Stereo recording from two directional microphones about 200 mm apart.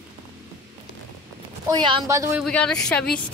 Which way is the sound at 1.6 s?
20° right (ahead or behind).